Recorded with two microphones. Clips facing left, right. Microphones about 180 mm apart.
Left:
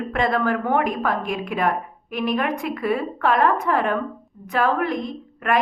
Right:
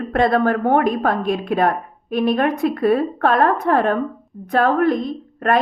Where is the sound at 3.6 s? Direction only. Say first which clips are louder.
Right 4 dB; 55° right (ahead or behind).